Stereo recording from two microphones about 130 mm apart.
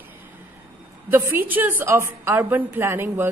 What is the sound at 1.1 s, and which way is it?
A woman's voice, 15° right (ahead or behind).